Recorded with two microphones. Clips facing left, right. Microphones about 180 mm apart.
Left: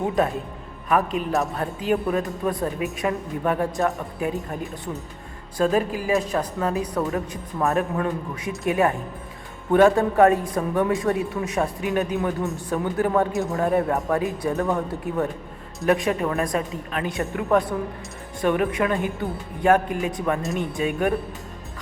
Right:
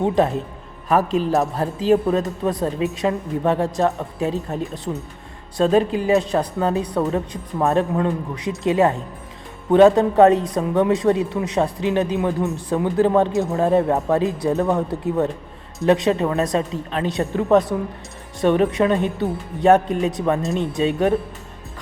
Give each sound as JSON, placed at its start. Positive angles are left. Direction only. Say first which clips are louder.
{"t": 0.9, "sound": "a man's voice", "louder": "right 4 dB", "side_deg": -30}